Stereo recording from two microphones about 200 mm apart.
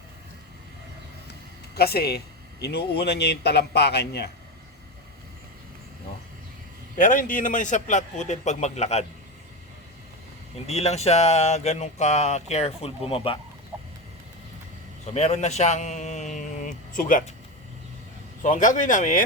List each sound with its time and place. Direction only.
1.7 s speech: 50° left (ahead or behind)
7.0 s speech: 45° left (ahead or behind)
10.7 s speech: 30° left (ahead or behind)
15.0 s speech: 35° left (ahead or behind)
18.4 s speech: 40° left (ahead or behind)